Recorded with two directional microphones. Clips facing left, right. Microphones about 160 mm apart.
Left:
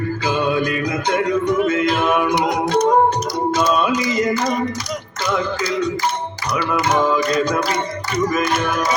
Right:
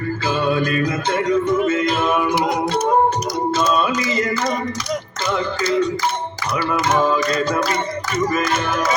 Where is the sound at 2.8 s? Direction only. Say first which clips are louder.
Left 2 dB; 10° right (ahead or behind).